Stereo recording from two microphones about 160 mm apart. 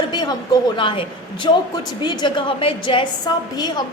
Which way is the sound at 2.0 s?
30° left (ahead or behind).